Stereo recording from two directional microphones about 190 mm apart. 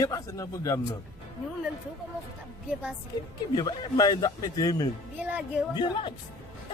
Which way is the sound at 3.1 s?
25° left (ahead or behind).